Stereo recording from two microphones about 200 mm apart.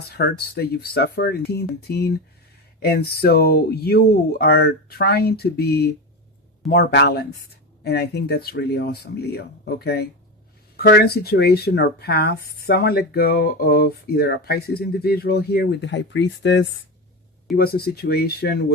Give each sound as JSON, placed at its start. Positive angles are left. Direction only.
{"t": 0.2, "sound": "speech", "side_deg": 55}
{"t": 17.6, "sound": "speech", "side_deg": 50}